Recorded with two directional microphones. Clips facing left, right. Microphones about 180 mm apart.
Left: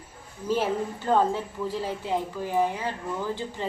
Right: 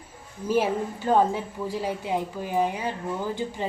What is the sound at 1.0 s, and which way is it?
A woman's voice, 15° right (ahead or behind).